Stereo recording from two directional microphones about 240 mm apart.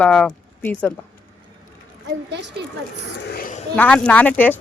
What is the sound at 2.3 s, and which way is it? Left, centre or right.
Speech, right.